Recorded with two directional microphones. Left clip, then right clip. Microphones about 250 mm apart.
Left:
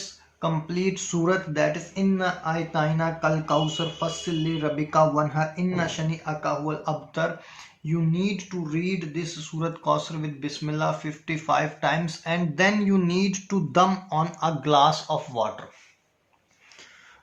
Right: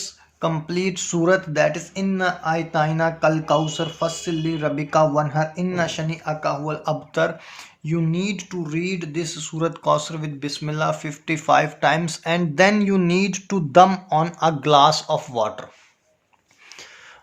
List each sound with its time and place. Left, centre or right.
0.4 s speech: right